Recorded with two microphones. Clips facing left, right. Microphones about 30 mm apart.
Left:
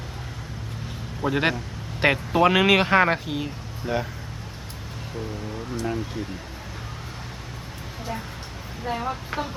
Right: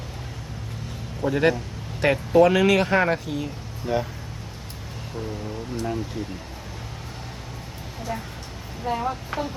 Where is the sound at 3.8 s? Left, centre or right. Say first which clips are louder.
Right 2 dB; centre.